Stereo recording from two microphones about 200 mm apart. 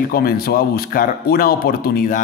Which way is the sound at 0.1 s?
50° left (ahead or behind).